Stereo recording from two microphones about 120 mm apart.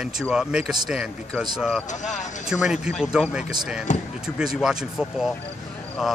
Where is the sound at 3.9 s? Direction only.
90° left.